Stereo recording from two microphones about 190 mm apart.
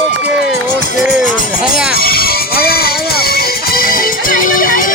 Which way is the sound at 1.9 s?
50° left (ahead or behind).